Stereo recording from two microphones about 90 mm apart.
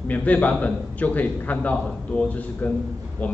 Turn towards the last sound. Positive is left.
turn(degrees=15)  # may be behind; listen again after turning